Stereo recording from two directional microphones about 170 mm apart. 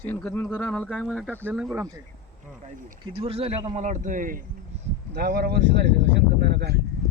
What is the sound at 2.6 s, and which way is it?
Speech, 40° right (ahead or behind).